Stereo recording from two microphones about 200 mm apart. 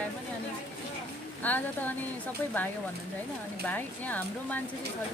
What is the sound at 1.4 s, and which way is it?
Speech, 10° left (ahead or behind).